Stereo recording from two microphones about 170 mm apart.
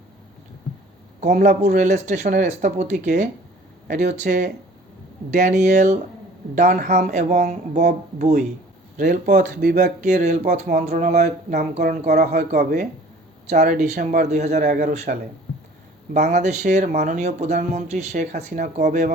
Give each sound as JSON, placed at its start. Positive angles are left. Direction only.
{"t": 1.2, "sound": "speech", "side_deg": -45}
{"t": 11.6, "sound": "a woman's voice", "side_deg": -60}
{"t": 12.4, "sound": "speech", "side_deg": -50}